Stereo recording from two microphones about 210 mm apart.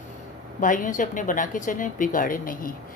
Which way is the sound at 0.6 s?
40° left (ahead or behind).